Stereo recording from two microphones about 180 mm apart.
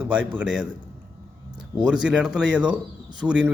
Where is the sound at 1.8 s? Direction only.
5° right (ahead or behind).